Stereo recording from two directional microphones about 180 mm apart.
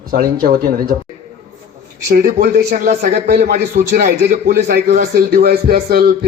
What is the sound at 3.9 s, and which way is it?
Speech, 45° right (ahead or behind).